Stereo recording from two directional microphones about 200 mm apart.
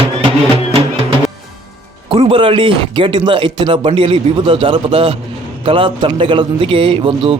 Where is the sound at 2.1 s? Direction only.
25° right (ahead or behind).